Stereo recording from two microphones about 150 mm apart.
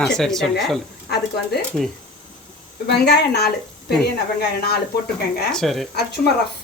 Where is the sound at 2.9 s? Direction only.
90° left.